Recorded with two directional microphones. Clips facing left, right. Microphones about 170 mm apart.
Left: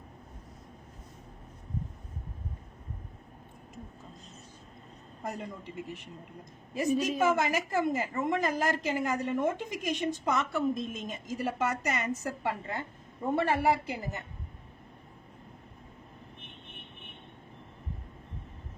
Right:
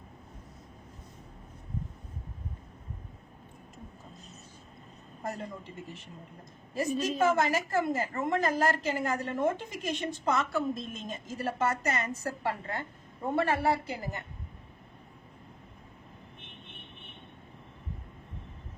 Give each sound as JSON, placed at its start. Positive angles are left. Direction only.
{"t": 5.2, "sound": "a woman's voice", "side_deg": 15}